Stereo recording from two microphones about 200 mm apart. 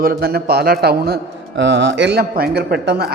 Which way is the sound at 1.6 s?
60° right (ahead or behind).